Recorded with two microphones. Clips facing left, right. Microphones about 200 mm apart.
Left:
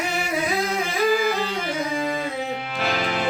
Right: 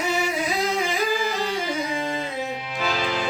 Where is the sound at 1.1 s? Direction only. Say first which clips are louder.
Left 4 dB; 60° left (ahead or behind).